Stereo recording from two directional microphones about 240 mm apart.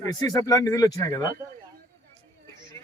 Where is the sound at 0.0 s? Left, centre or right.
Centre.